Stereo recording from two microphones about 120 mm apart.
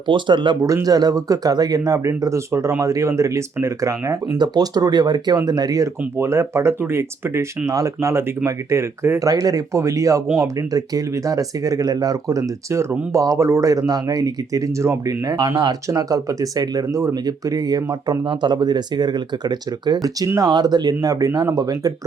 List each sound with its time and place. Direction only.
0.1 s speech: 40° right (ahead or behind)
0.6 s speech: 30° right (ahead or behind)